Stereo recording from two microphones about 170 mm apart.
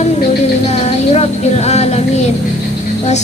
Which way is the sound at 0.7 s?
40° left (ahead or behind).